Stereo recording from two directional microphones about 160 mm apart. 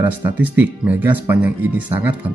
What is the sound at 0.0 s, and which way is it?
Speech, 10° right (ahead or behind).